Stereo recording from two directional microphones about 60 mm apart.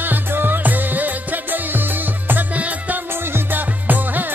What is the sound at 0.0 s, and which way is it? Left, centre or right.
Music, right.